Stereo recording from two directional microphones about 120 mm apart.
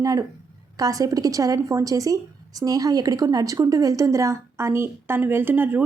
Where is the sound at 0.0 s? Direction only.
30° right (ahead or behind).